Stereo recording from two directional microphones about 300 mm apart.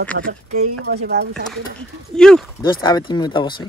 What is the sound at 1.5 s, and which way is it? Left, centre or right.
Speech, centre.